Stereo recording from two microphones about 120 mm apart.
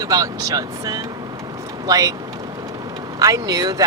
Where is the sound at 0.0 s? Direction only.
30° right (ahead or behind).